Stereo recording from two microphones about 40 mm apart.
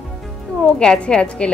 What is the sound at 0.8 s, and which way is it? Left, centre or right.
Speech, centre.